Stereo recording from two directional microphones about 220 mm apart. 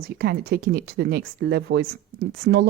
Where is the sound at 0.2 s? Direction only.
45° right (ahead or behind).